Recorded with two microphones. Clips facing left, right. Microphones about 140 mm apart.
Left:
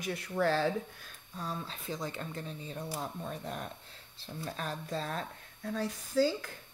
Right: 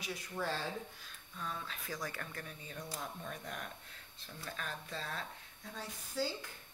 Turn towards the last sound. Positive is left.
turn(degrees=85)